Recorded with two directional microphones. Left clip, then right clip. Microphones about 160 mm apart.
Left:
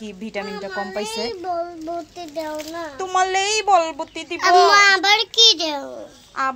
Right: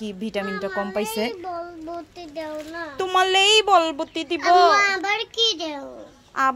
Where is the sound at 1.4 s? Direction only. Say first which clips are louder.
Left 6 dB; 15° left (ahead or behind).